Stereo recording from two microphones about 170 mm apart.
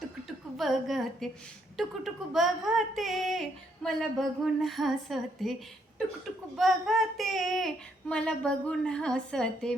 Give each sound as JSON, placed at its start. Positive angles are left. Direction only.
{"t": 0.5, "sound": "speech", "side_deg": 0}
{"t": 6.6, "sound": "speech", "side_deg": 0}